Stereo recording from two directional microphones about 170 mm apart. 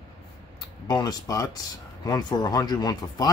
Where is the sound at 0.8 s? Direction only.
25° left (ahead or behind).